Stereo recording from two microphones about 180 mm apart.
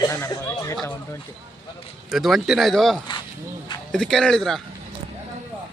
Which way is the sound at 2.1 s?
Centre (ahead or behind).